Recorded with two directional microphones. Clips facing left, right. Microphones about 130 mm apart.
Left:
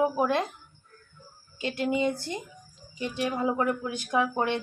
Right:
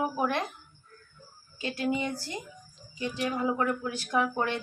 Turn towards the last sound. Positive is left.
turn(degrees=20)  # may be behind; listen again after turning